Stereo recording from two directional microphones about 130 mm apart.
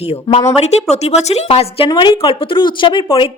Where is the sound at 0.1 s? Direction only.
55° left (ahead or behind).